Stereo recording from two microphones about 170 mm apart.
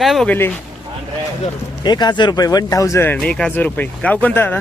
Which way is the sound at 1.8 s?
25° left (ahead or behind).